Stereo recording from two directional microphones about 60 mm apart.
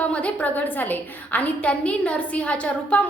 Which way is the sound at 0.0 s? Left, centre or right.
Left.